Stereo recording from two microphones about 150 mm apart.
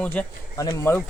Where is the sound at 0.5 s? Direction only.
20° left (ahead or behind).